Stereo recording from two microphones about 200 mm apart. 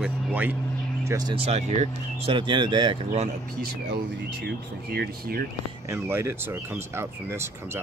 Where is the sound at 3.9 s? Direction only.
55° right (ahead or behind).